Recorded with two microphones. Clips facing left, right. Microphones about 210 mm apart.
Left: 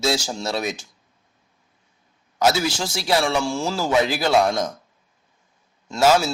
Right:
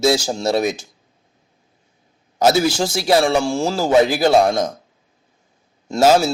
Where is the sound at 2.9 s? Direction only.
45° right (ahead or behind).